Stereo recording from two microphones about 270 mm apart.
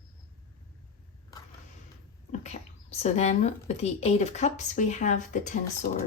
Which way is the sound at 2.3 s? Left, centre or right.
Left.